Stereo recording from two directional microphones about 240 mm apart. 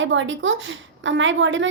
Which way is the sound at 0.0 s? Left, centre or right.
Right.